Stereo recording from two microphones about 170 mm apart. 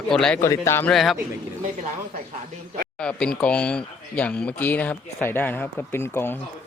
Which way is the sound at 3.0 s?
5° left (ahead or behind).